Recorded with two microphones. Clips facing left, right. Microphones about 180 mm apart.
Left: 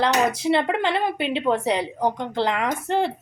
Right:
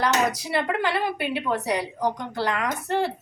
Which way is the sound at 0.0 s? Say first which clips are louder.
Left 3 dB; 25° left (ahead or behind).